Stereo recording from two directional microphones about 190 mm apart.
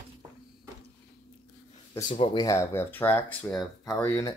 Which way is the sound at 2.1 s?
25° left (ahead or behind).